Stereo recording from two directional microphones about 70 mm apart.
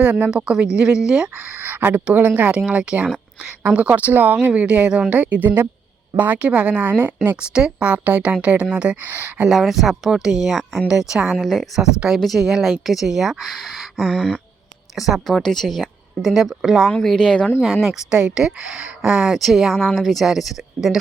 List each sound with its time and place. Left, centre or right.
0.6 s a woman's voice: centre
1.6 s a woman's voice: right
9.5 s speech: centre
16.9 s speech: centre
17.6 s a woman's voice: centre